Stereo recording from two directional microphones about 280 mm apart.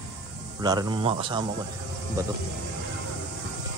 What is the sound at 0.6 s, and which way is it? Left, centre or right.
Speech, centre.